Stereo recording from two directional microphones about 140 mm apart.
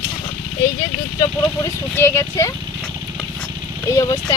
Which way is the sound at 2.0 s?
20° left (ahead or behind).